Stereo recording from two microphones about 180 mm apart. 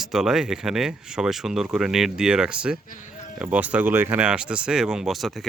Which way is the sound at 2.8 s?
45° left (ahead or behind).